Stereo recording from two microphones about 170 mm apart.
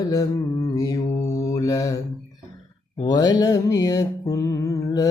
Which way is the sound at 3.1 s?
25° left (ahead or behind).